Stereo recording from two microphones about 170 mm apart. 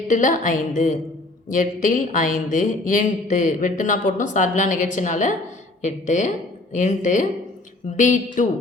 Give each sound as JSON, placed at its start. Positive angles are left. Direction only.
{"t": 0.1, "sound": "speech", "side_deg": 50}